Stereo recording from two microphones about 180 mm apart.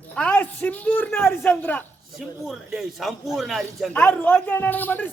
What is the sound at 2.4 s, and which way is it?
A man's voice, centre (ahead or behind).